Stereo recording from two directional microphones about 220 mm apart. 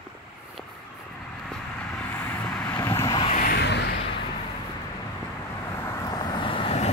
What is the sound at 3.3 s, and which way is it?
Vehicle, 40° left (ahead or behind).